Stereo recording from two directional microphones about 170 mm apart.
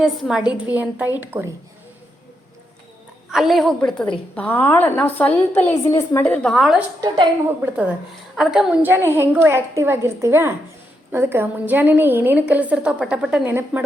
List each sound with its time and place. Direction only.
0.0 s a woman's voice: centre (ahead or behind)
3.3 s a woman's voice: centre (ahead or behind)
7.0 s a woman's voice: 20° right (ahead or behind)
8.4 s a woman's voice: 5° right (ahead or behind)